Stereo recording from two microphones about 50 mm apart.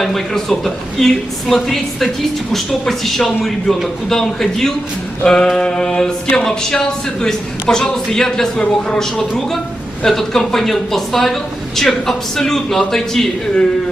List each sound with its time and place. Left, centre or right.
0.0 s speech: centre